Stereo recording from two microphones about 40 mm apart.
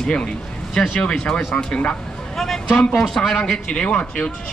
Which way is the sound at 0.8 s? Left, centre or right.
Centre.